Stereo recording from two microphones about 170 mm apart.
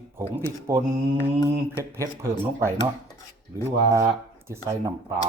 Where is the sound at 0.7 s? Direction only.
15° right (ahead or behind).